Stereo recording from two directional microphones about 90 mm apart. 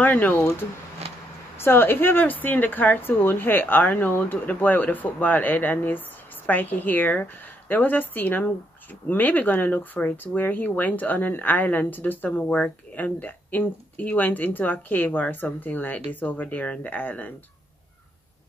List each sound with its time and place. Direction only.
0.0 s speech: 20° left (ahead or behind)
1.6 s speech: 25° left (ahead or behind)